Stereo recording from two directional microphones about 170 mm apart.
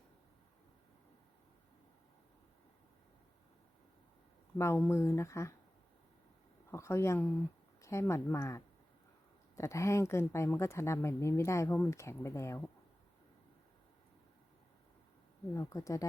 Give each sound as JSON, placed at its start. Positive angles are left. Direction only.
{"t": 4.5, "sound": "speech", "side_deg": 15}
{"t": 6.7, "sound": "speech", "side_deg": 15}
{"t": 15.5, "sound": "speech", "side_deg": 20}